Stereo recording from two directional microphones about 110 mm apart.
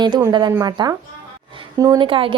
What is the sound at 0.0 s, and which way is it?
A woman's voice, 40° right (ahead or behind).